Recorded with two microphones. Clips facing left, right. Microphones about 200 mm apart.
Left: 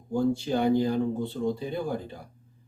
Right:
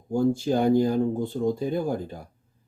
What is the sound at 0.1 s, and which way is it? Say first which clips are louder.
Speech: right 3 dB; 45° right (ahead or behind).